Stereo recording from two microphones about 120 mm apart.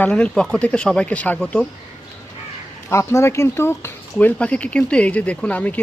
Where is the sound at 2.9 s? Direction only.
25° left (ahead or behind).